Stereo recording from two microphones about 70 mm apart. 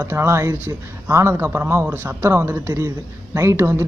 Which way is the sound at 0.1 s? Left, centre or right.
Right.